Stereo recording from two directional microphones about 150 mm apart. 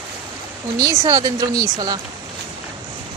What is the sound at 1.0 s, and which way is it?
Speech, 25° right (ahead or behind).